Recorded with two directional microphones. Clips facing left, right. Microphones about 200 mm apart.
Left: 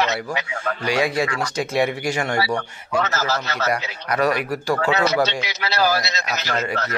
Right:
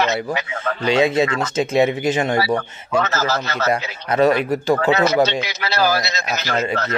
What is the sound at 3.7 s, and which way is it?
A man's voice, 25° right (ahead or behind).